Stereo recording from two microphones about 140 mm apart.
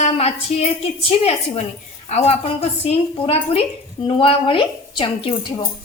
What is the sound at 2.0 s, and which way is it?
A woman's voice, 50° left (ahead or behind).